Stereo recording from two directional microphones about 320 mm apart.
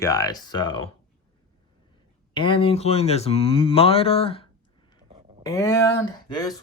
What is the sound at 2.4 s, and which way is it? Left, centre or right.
Speech, centre.